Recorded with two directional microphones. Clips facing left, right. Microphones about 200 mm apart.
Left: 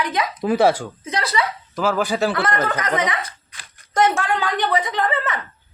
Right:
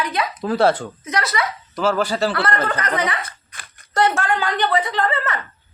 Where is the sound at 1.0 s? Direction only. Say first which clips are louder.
Even; 30° left (ahead or behind).